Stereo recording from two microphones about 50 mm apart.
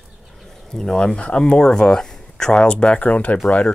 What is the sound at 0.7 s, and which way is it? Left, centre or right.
Speech, centre.